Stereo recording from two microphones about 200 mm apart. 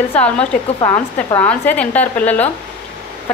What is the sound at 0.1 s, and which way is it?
Speech, 5° left (ahead or behind).